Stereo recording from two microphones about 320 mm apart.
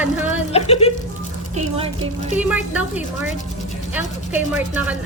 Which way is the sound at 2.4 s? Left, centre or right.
Centre.